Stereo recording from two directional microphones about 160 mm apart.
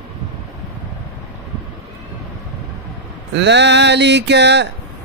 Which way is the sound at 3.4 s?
90° right.